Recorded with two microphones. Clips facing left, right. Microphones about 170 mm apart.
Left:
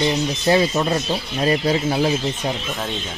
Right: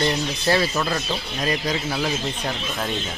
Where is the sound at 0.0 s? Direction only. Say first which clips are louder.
Left 3 dB; 20° left (ahead or behind).